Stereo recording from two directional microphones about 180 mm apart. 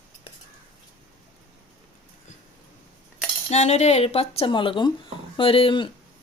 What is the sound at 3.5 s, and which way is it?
Speech, 40° left (ahead or behind).